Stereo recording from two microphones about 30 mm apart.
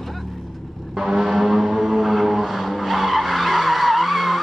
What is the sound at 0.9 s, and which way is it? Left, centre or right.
Vehicle, centre.